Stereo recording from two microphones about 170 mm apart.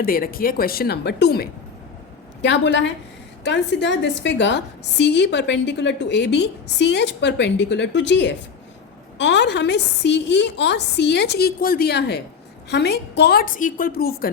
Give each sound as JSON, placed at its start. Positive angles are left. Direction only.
{"t": 0.0, "sound": "a woman's voice", "side_deg": 60}
{"t": 2.4, "sound": "a woman's voice", "side_deg": 90}